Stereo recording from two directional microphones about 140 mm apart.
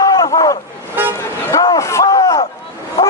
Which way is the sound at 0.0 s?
25° left (ahead or behind).